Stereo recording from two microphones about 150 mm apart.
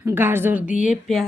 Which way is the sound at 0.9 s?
Centre (ahead or behind).